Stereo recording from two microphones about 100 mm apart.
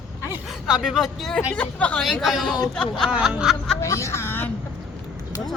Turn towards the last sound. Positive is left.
turn(degrees=25)  # may be behind; listen again after turning